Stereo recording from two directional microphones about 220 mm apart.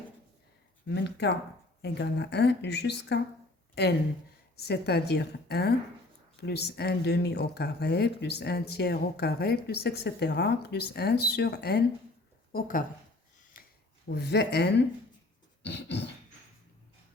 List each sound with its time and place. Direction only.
0.9 s a woman's voice: 50° left (ahead or behind)
13.5 s a sound: 40° left (ahead or behind)
14.1 s a woman's voice: 50° left (ahead or behind)